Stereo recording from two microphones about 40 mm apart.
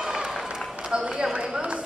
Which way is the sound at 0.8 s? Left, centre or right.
Right.